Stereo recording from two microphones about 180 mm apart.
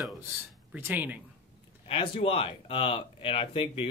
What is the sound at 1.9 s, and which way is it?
Speech, 30° left (ahead or behind).